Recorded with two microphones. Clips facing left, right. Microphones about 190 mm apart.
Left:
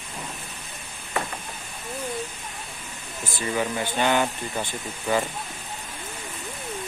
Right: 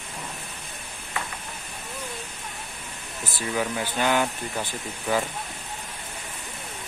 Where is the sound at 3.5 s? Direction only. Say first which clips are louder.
Left 1 dB; centre (ahead or behind).